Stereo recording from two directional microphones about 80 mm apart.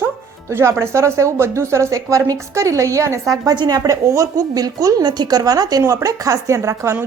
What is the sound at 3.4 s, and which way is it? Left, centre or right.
Speech, right.